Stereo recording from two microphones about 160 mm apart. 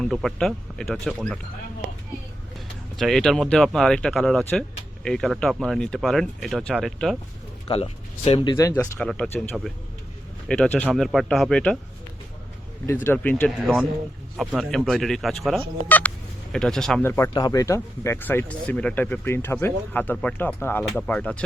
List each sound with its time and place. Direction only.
0.0 s speech: centre (ahead or behind)
3.0 s speech: 5° left (ahead or behind)
7.7 s speech: 40° left (ahead or behind)
8.5 s speech: 15° left (ahead or behind)
13.1 s speech: 10° left (ahead or behind)
17.0 s speech: 15° left (ahead or behind)